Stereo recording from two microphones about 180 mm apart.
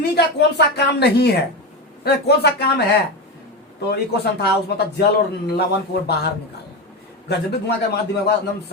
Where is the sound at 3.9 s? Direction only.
65° left (ahead or behind).